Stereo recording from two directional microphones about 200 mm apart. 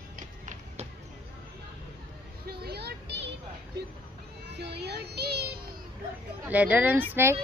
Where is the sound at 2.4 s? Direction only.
50° right (ahead or behind).